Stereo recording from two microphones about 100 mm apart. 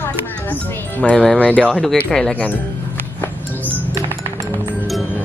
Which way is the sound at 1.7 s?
Centre (ahead or behind).